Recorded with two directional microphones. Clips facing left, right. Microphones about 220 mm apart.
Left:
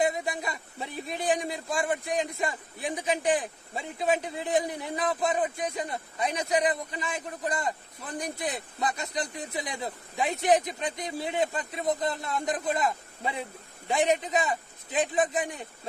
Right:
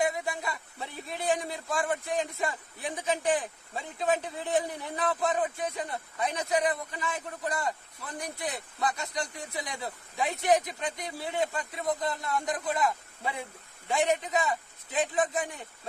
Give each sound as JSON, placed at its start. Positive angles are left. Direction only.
{"t": 0.0, "sound": "a man's voice", "side_deg": 20}